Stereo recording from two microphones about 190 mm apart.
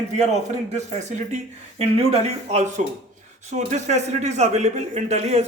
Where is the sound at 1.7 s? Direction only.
35° right (ahead or behind).